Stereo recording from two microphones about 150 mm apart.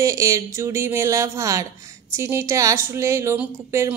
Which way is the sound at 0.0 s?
20° right (ahead or behind).